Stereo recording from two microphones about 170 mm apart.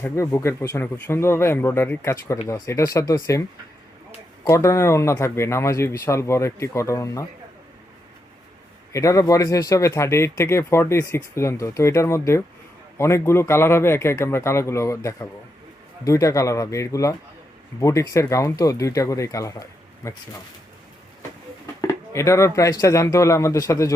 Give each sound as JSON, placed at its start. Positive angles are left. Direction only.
{"t": 0.0, "sound": "speech", "side_deg": 15}
{"t": 4.4, "sound": "speech", "side_deg": 15}
{"t": 8.9, "sound": "speech", "side_deg": 20}
{"t": 21.8, "sound": "speech", "side_deg": 15}